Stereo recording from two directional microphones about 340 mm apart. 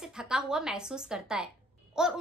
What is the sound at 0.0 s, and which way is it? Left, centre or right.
A woman's voice, centre.